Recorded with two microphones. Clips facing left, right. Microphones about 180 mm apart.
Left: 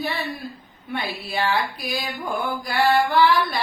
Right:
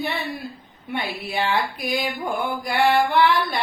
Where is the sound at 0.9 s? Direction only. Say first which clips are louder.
Right 1 dB; 20° right (ahead or behind).